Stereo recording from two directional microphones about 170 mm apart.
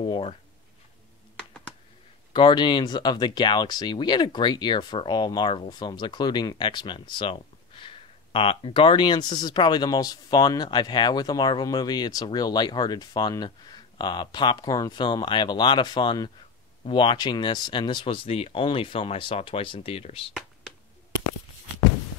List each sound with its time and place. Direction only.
0.0 s speech: 30° left (ahead or behind)
2.3 s speech: 25° left (ahead or behind)